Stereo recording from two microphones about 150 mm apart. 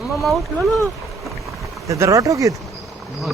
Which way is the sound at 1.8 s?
20° right (ahead or behind).